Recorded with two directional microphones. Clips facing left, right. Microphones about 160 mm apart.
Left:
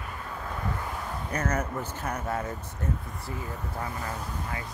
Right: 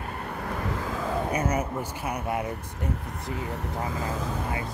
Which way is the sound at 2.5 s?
90° right.